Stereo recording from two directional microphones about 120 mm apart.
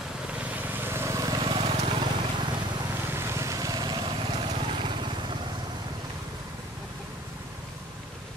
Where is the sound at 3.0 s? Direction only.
20° right (ahead or behind); by 5.3 s 40° right (ahead or behind).